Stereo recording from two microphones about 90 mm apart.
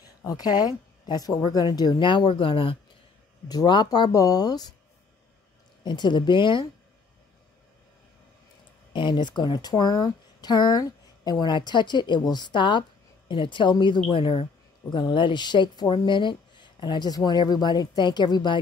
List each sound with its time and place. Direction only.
0.2 s speech: 45° left (ahead or behind)
1.7 s speech: 55° left (ahead or behind); by 2.8 s 80° left
3.4 s speech: 50° left (ahead or behind)
5.9 s speech: 60° left (ahead or behind)
8.9 s speech: 60° left (ahead or behind)
14.1 s speech: 75° left (ahead or behind)
14.9 s speech: 60° left (ahead or behind)